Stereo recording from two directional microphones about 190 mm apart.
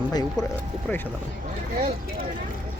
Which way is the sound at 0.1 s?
20° left (ahead or behind).